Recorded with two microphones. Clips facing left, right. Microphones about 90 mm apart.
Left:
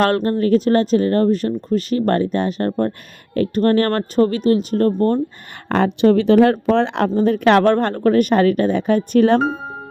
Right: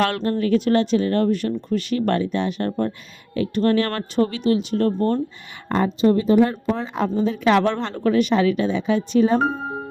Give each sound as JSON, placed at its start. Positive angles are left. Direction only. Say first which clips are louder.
{"t": 0.0, "sound": "speech", "louder": "left 4 dB", "side_deg": 45}
{"t": 5.6, "sound": "speech", "louder": "left 4 dB", "side_deg": 70}
{"t": 7.2, "sound": "speech", "louder": "left 4 dB", "side_deg": 55}